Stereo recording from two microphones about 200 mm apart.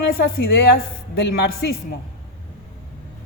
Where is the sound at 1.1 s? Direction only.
55° left (ahead or behind).